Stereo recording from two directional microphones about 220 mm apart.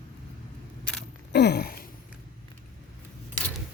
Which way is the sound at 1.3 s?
50° left (ahead or behind).